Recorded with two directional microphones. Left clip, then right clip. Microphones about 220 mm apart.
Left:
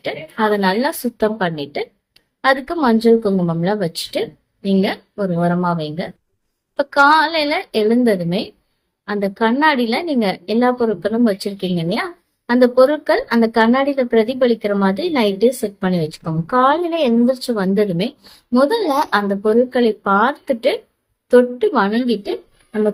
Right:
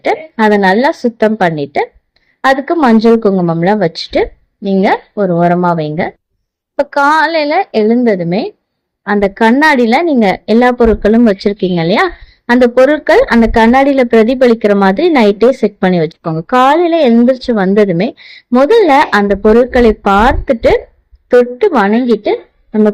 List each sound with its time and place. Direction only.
0.0 s a woman's voice: 30° right (ahead or behind)